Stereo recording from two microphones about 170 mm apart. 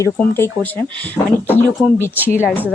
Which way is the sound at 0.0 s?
15° left (ahead or behind).